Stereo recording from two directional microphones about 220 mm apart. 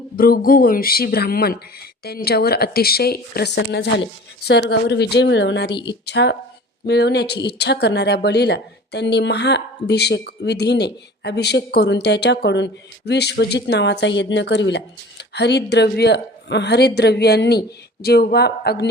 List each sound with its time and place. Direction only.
0.2 s speech: 40° left (ahead or behind)
5.7 s speech: 20° left (ahead or behind)
6.1 s speech: 50° left (ahead or behind)